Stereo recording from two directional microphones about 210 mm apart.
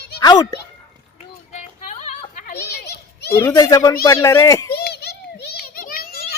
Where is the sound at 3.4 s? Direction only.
15° left (ahead or behind).